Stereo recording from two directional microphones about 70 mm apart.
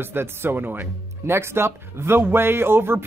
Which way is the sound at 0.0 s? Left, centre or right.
Right.